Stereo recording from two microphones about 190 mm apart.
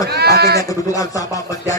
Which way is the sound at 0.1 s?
55° right (ahead or behind).